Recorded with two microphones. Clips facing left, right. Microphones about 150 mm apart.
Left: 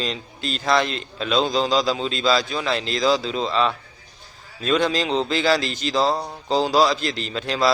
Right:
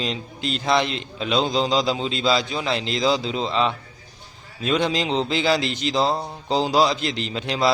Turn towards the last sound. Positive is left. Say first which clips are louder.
# even
turn(degrees=-20)  # may be behind; listen again after turning